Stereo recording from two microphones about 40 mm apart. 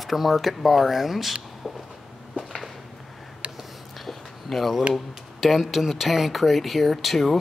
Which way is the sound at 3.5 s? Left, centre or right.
Centre.